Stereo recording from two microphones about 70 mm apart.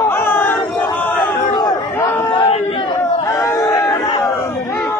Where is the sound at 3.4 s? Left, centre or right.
Left.